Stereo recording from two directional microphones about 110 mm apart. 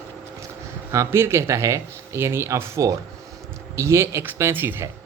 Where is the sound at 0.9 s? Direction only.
25° right (ahead or behind).